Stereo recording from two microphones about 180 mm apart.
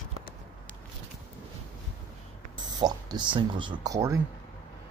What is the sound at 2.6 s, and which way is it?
Speech, 20° right (ahead or behind).